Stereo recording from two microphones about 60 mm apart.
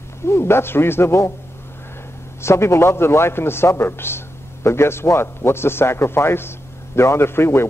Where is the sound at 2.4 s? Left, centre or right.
Left.